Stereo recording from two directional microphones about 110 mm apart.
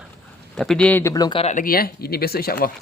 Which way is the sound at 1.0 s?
35° left (ahead or behind).